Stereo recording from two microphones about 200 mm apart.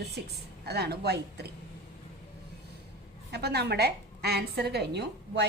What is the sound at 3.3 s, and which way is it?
A woman's voice, 55° right (ahead or behind).